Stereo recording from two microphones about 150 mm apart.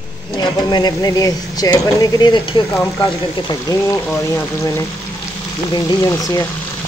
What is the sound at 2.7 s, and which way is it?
Speech, 20° left (ahead or behind).